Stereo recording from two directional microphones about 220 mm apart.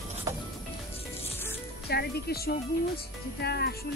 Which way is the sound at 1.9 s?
45° left (ahead or behind).